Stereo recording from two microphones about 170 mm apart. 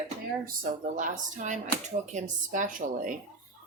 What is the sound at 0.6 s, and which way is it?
Speech, 50° right (ahead or behind).